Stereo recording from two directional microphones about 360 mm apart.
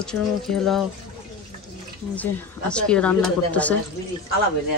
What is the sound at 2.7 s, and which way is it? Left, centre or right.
Speech, centre.